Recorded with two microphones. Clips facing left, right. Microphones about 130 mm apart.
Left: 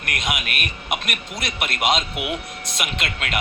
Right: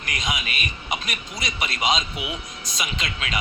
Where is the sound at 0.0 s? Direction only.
55° left (ahead or behind).